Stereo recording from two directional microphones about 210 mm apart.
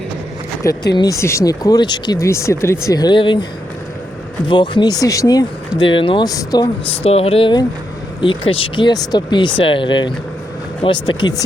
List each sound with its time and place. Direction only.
0.6 s speech: 15° left (ahead or behind)
4.4 s speech: 20° left (ahead or behind)